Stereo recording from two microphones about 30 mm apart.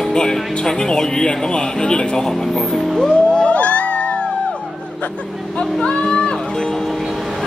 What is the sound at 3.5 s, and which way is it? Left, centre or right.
Music, left.